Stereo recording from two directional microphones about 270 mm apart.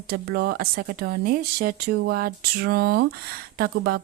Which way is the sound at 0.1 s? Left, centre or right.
Right.